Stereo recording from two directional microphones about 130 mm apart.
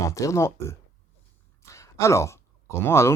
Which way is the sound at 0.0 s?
25° left (ahead or behind).